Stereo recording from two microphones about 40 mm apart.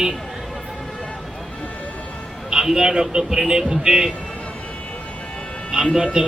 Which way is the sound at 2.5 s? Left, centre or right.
Centre.